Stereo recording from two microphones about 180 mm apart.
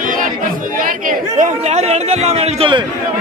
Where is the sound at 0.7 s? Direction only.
50° right (ahead or behind); by 2.8 s 35° right (ahead or behind).